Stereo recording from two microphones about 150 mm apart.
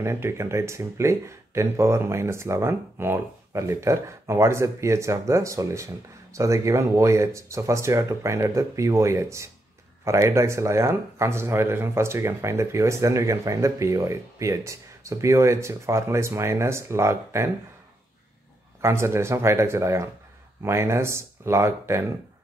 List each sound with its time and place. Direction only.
0.0 s speech: 15° right (ahead or behind)
18.8 s speech: 15° right (ahead or behind)